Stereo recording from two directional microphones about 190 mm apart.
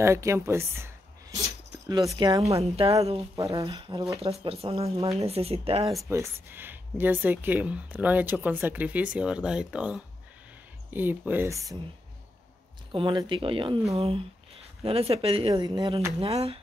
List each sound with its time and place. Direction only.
0.0 s speech: 15° right (ahead or behind)
2.6 s speech: 30° right (ahead or behind)
3.3 s speech: 15° right (ahead or behind)
3.6 s speech: 30° right (ahead or behind)
6.0 s speech: 15° right (ahead or behind)
12.9 s speech: 25° right (ahead or behind)